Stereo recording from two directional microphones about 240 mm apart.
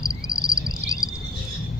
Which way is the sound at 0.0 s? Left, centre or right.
Centre.